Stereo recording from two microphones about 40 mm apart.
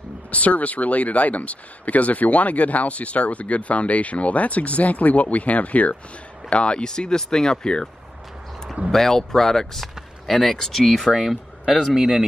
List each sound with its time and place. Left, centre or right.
0.3 s speech: left
6.9 s speech: centre
8.9 s speech: centre